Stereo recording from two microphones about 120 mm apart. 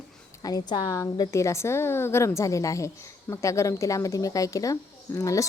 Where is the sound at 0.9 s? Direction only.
25° left (ahead or behind).